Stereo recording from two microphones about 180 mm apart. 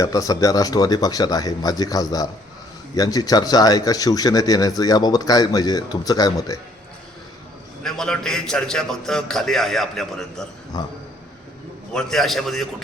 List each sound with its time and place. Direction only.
0.0 s speech: 20° left (ahead or behind)
7.9 s a man's voice: 5° left (ahead or behind)
10.7 s speech: 20° left (ahead or behind)
11.9 s a man's voice: centre (ahead or behind)